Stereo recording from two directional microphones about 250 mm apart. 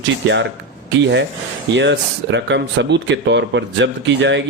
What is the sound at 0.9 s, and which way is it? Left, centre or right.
Speech, right.